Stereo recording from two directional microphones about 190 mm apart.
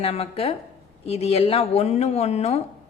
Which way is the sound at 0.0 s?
30° left (ahead or behind).